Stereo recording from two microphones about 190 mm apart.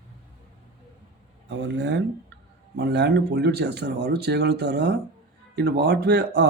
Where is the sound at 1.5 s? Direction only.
65° right (ahead or behind).